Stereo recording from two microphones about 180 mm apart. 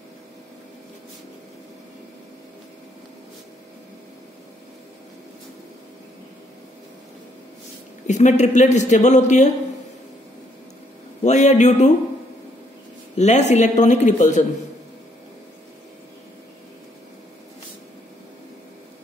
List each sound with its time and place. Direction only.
8.1 s speech: 40° left (ahead or behind)
11.2 s a sound: 40° left (ahead or behind)
13.1 s speech: 40° left (ahead or behind)